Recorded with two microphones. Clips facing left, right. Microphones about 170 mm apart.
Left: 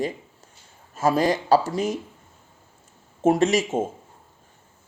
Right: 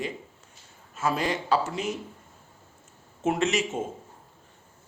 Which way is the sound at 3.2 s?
40° left (ahead or behind).